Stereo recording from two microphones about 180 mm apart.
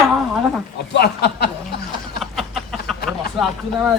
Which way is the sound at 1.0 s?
65° left (ahead or behind).